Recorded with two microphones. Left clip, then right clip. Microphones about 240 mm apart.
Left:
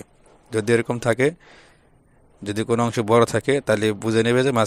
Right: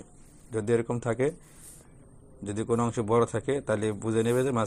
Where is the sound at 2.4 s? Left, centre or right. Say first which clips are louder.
Left 7 dB; left.